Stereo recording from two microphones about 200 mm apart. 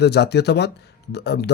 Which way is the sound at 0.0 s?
55° left (ahead or behind).